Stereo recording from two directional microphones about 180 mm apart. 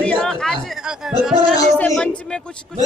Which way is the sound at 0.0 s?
5° left (ahead or behind).